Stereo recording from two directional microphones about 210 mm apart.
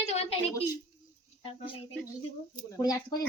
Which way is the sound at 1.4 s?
25° left (ahead or behind).